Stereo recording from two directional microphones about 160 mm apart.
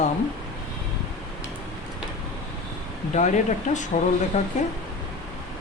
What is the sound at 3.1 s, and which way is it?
Speech, 50° left (ahead or behind).